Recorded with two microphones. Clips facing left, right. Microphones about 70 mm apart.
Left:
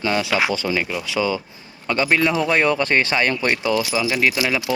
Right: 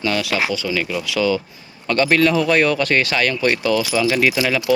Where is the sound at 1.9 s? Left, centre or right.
Centre.